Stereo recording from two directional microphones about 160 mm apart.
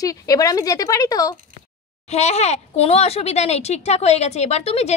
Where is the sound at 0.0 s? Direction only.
20° left (ahead or behind).